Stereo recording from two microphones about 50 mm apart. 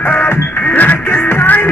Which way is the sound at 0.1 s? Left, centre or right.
Left.